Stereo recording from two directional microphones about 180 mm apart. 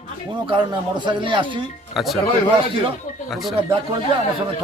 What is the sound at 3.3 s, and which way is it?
Speech, centre (ahead or behind).